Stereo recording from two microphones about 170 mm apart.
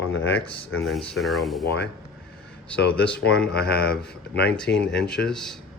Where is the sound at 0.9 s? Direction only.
Centre (ahead or behind).